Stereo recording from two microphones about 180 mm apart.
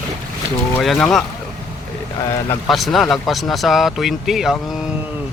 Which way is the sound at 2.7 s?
Centre (ahead or behind).